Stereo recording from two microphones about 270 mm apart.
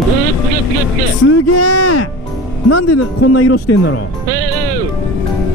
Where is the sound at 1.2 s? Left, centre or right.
Left.